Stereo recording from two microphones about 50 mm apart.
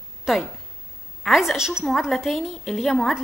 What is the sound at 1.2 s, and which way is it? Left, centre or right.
Speech, centre.